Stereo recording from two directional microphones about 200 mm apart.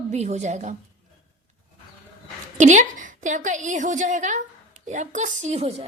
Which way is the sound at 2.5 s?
40° right (ahead or behind).